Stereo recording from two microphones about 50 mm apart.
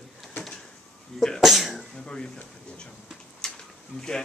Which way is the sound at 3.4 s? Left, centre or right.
Centre.